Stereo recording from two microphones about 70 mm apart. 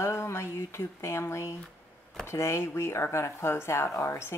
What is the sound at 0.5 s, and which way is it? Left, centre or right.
A woman's voice, left.